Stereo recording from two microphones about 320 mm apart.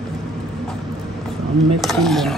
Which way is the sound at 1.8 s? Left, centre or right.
Centre.